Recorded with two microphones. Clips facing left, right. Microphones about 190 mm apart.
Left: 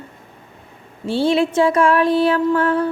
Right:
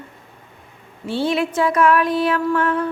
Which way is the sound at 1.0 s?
30° left (ahead or behind).